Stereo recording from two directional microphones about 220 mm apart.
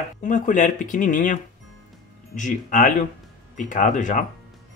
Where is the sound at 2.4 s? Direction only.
35° left (ahead or behind).